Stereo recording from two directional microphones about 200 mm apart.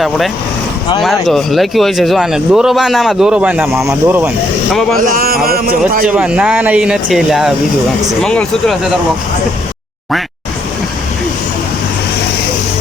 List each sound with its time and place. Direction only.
1.0 s speech: centre (ahead or behind)
4.7 s speech: centre (ahead or behind)
4.9 s a man's voice: 45° right (ahead or behind)
6.1 s speech: 5° right (ahead or behind)